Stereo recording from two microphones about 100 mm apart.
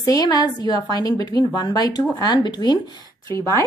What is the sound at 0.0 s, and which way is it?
A woman's voice, 40° left (ahead or behind).